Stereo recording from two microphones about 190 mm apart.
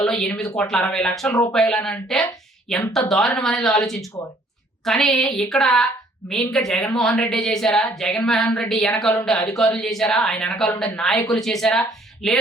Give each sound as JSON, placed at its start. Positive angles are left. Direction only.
{"t": 0.0, "sound": "a woman's voice", "side_deg": 5}
{"t": 1.3, "sound": "speech", "side_deg": 20}
{"t": 1.5, "sound": "a woman's voice", "side_deg": 5}